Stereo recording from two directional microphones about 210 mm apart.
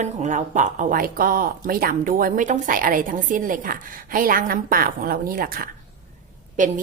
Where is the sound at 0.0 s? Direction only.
35° right (ahead or behind).